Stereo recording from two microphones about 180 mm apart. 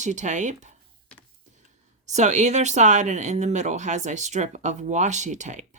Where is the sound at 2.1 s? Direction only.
40° right (ahead or behind).